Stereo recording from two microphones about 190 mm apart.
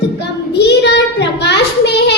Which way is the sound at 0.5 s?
60° left (ahead or behind).